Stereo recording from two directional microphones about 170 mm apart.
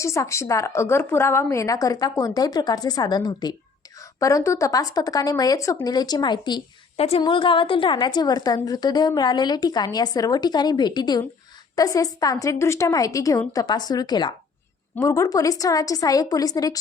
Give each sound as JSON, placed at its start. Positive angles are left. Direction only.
{"t": 0.0, "sound": "a woman's voice", "side_deg": 15}